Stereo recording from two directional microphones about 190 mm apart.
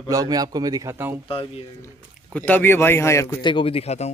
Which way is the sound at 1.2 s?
30° left (ahead or behind).